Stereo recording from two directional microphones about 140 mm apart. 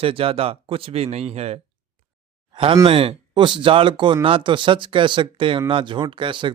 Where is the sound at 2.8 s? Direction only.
40° right (ahead or behind).